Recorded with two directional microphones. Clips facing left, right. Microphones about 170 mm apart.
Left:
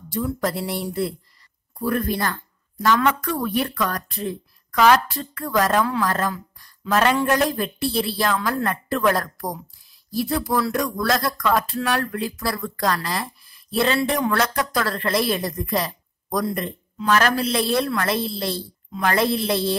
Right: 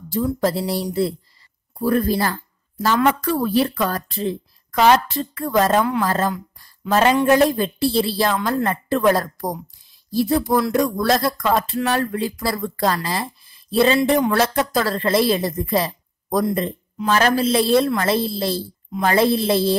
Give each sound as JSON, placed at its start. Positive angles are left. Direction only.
{"t": 0.4, "sound": "a woman's voice", "side_deg": -30}